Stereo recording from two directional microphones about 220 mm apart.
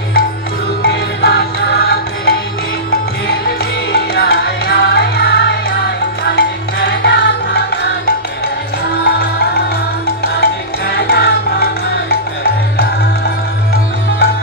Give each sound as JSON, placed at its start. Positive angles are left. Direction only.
{"t": 0.8, "sound": "music", "side_deg": 50}
{"t": 9.0, "sound": "music", "side_deg": 45}